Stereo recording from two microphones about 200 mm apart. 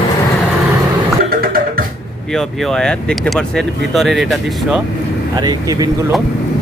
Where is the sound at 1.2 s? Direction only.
45° right (ahead or behind).